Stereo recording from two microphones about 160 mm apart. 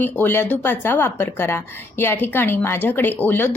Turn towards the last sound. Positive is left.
turn(degrees=10)  # may be behind; listen again after turning